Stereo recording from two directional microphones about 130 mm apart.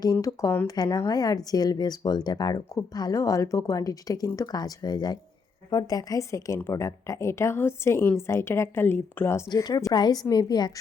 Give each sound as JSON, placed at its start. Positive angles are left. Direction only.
{"t": 0.0, "sound": "a woman's voice", "side_deg": 25}
{"t": 9.5, "sound": "a woman's voice", "side_deg": 30}